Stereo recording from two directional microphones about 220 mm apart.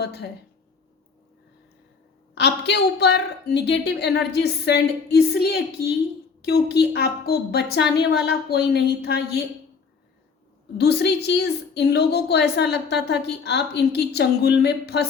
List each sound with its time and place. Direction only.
0.0 s a woman's voice: 50° left (ahead or behind)
2.3 s a woman's voice: 50° left (ahead or behind)
10.8 s a woman's voice: 50° left (ahead or behind)